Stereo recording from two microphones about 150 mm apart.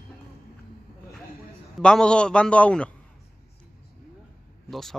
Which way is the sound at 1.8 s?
5° left (ahead or behind).